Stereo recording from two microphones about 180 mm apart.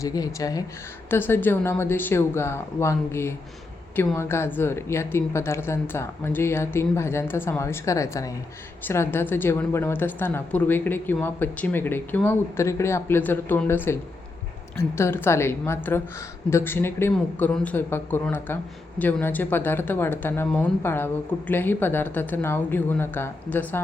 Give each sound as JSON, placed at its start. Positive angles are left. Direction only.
{"t": 0.0, "sound": "speech", "side_deg": 20}